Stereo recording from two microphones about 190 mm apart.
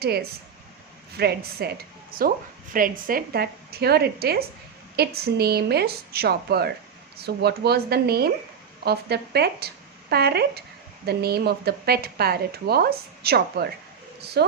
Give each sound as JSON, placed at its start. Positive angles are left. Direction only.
{"t": 0.0, "sound": "speech", "side_deg": -55}